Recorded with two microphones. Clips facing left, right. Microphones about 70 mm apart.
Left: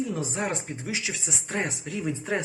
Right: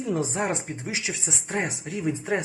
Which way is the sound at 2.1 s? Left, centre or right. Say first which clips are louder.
Right 3 dB; right.